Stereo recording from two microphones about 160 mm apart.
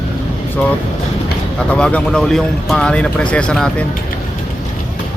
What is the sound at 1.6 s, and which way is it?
Speech, 5° left (ahead or behind).